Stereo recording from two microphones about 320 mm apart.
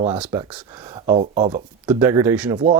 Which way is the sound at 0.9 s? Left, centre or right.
Centre.